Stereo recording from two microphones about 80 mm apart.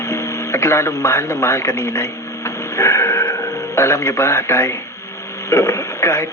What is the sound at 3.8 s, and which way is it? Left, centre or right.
Speech, left.